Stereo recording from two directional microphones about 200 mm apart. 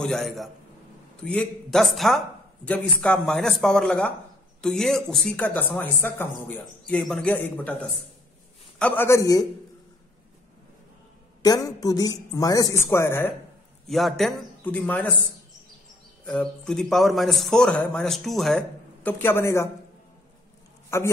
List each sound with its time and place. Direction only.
0.0 s speech: centre (ahead or behind)
8.7 s speech: 5° left (ahead or behind)
11.4 s speech: 20° left (ahead or behind)
13.8 s speech: centre (ahead or behind)
16.3 s speech: 5° left (ahead or behind)
20.9 s speech: 15° left (ahead or behind)